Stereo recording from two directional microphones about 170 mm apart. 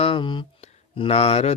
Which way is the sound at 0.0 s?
30° left (ahead or behind).